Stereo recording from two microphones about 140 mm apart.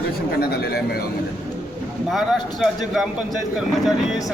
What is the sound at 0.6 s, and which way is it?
Speech, 90° left.